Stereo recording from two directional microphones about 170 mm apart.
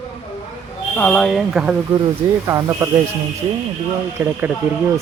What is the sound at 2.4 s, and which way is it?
Speech, 15° right (ahead or behind).